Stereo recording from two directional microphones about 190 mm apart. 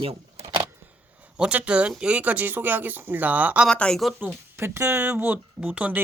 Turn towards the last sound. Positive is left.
turn(degrees=-5)  # may be behind; listen again after turning